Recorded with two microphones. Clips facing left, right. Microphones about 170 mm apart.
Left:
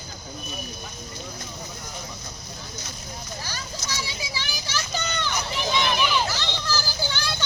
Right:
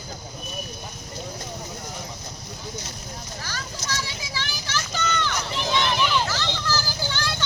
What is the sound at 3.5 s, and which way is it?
Vehicle, 15° left (ahead or behind).